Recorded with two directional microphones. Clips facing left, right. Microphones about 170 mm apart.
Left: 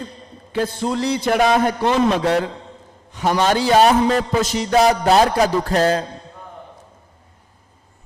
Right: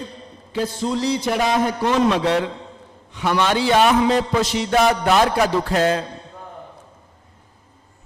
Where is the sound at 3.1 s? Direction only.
40° left (ahead or behind).